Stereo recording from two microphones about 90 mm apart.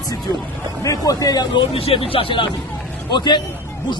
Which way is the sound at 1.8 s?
90° left.